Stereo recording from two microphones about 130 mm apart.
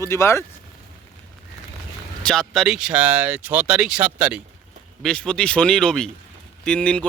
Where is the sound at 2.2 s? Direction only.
5° left (ahead or behind).